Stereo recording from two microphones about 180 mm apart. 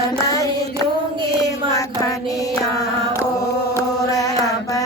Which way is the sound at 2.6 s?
20° left (ahead or behind).